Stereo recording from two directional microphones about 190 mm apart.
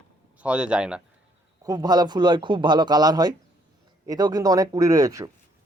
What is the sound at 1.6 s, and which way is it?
Speech, 20° right (ahead or behind).